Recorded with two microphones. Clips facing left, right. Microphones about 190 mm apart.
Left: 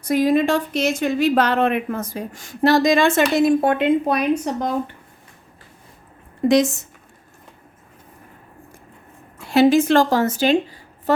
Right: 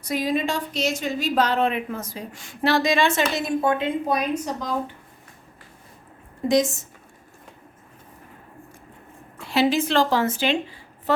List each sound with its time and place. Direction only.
0.0 s speech: 55° left (ahead or behind)
6.5 s a woman's voice: 65° left (ahead or behind)
9.5 s speech: 50° left (ahead or behind)